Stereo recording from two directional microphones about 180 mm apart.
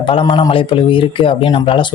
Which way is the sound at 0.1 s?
30° left (ahead or behind).